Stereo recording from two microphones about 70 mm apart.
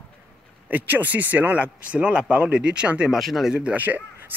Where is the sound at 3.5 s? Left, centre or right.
Centre.